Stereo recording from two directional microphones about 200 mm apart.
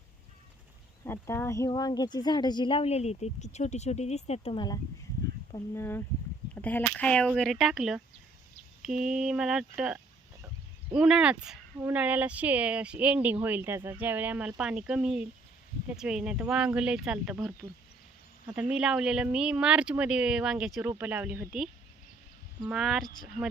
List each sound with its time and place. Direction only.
1.0 s speech: 10° left (ahead or behind)